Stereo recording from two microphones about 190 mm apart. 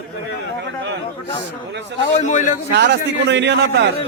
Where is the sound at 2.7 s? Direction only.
65° right (ahead or behind).